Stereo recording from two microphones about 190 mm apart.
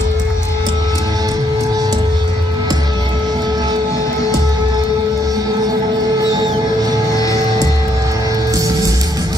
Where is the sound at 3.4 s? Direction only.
20° right (ahead or behind).